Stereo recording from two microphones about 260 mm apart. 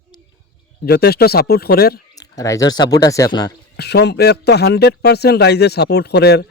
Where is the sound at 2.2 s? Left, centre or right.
Centre.